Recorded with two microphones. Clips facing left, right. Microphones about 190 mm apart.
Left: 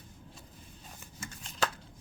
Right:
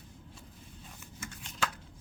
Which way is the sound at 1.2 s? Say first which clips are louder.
Left 3 dB; 35° left (ahead or behind).